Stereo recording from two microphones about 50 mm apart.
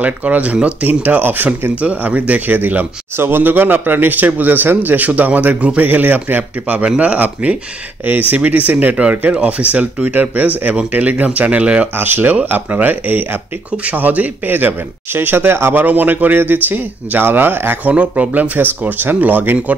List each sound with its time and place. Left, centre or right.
0.0 s speech: right
1.8 s speech: right
12.0 s speech: right
15.8 s speech: right
17.9 s speech: right
18.6 s speech: right